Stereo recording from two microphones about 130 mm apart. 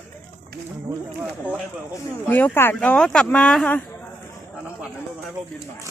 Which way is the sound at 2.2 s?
15° left (ahead or behind).